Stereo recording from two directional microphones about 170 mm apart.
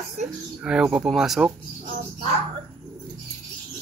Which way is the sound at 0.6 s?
5° right (ahead or behind).